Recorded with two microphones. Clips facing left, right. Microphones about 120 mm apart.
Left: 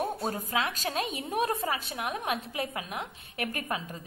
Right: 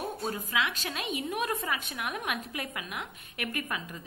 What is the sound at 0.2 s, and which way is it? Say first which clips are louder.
A woman's voice: left 1 dB; 40° left (ahead or behind).